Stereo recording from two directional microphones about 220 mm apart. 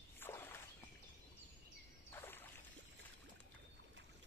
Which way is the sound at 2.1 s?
10° left (ahead or behind).